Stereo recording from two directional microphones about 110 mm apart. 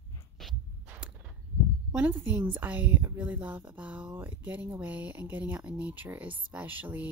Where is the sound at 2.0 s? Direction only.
15° right (ahead or behind).